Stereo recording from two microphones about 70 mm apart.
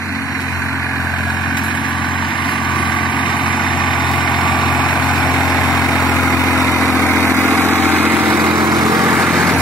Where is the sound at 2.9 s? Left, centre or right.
Left.